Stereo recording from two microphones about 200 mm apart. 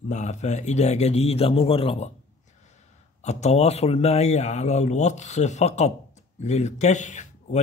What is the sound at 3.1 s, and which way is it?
Speech, 35° left (ahead or behind).